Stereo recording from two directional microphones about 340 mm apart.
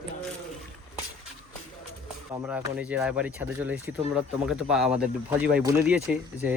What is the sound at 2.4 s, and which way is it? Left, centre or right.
Speech, centre.